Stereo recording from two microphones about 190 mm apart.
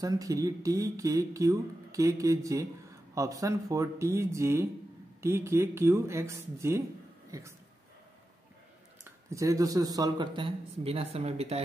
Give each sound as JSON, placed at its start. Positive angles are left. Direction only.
{"t": 0.0, "sound": "speech", "side_deg": -20}
{"t": 9.0, "sound": "speech", "side_deg": -15}